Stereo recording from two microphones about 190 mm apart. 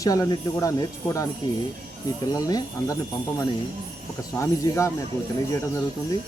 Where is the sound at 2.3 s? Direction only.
20° left (ahead or behind).